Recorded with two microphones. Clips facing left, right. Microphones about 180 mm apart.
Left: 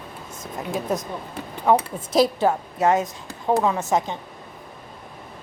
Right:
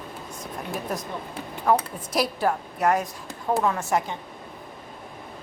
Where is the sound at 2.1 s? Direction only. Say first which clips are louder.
Left 6 dB; 25° left (ahead or behind).